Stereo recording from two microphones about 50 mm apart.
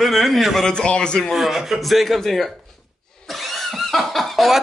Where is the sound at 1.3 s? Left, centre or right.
Centre.